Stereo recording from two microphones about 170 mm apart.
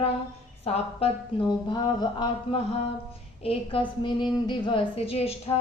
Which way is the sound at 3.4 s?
35° left (ahead or behind).